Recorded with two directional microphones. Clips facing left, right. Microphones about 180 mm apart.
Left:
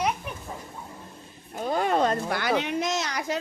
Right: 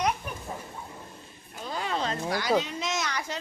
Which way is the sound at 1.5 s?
50° left (ahead or behind).